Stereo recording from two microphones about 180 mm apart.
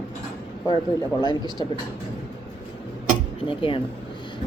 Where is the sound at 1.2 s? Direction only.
25° left (ahead or behind).